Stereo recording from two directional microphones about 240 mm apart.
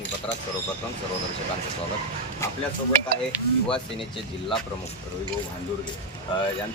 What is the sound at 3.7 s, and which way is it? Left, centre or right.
Speech, left.